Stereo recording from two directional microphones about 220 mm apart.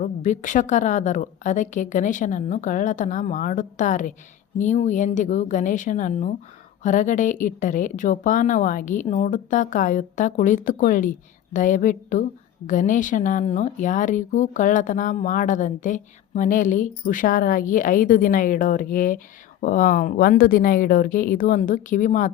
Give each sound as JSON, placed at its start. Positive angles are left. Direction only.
{"t": 0.0, "sound": "speech", "side_deg": 35}